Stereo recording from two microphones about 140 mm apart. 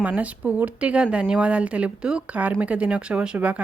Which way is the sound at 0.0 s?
10° right (ahead or behind).